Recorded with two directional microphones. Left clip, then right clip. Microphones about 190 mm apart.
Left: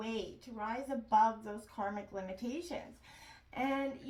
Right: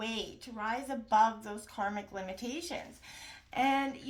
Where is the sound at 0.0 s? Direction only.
35° right (ahead or behind).